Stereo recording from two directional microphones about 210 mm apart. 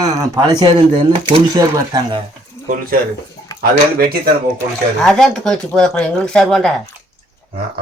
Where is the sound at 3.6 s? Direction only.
45° right (ahead or behind).